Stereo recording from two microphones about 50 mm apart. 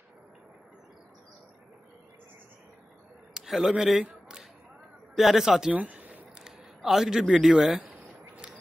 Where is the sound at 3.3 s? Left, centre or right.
Centre.